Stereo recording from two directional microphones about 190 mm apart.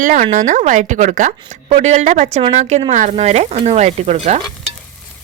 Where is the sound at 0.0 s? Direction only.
40° right (ahead or behind).